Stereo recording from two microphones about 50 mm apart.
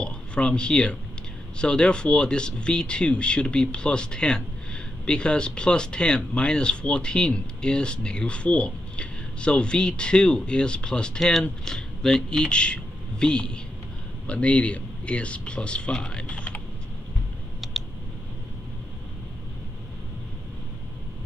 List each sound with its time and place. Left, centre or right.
0.0 s speech: centre